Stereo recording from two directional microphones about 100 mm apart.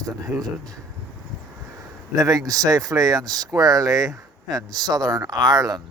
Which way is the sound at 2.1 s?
35° right (ahead or behind).